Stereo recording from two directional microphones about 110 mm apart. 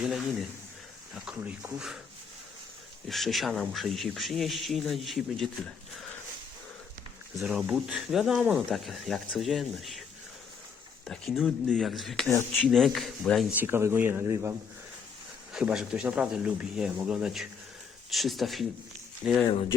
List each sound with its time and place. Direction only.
0.0 s speech: 5° right (ahead or behind)
3.1 s speech: centre (ahead or behind)
7.3 s speech: 5° right (ahead or behind)
11.0 s speech: 5° left (ahead or behind)
13.6 s speech: 20° right (ahead or behind)
15.5 s speech: 5° right (ahead or behind)
19.2 s speech: 10° right (ahead or behind)